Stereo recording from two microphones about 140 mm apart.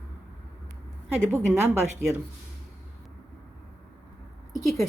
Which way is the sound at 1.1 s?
15° right (ahead or behind).